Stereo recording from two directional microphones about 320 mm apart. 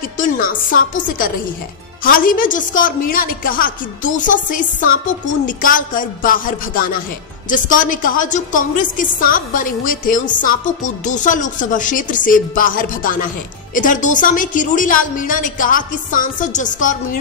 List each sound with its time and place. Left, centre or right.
0.2 s a woman's voice: left